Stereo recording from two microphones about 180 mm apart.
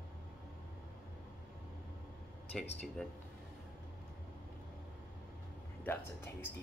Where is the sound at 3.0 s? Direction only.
5° left (ahead or behind).